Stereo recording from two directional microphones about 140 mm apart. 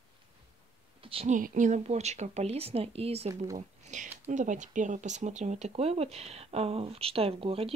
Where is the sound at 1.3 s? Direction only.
65° right (ahead or behind); by 3.3 s 45° right (ahead or behind).